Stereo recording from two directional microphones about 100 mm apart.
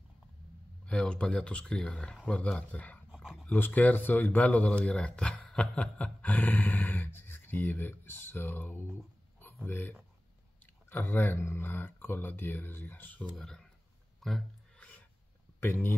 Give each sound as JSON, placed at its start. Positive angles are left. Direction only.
{"t": 0.8, "sound": "speech", "side_deg": 10}
{"t": 3.1, "sound": "dog", "side_deg": -5}
{"t": 3.4, "sound": "speech", "side_deg": 20}
{"t": 13.2, "sound": "speech", "side_deg": 5}
{"t": 14.2, "sound": "a sound", "side_deg": 5}
{"t": 15.6, "sound": "speech", "side_deg": 20}